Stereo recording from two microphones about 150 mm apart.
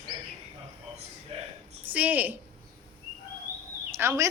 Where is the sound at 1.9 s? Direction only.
10° right (ahead or behind).